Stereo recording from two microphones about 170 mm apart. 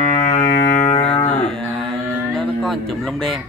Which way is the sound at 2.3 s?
Centre (ahead or behind).